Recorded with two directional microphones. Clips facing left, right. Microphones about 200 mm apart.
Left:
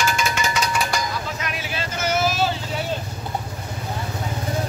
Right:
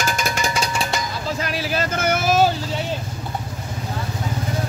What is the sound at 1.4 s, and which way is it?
Vehicle, 35° right (ahead or behind).